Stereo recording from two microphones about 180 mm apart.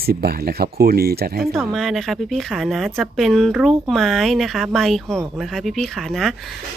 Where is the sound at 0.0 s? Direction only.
60° right (ahead or behind).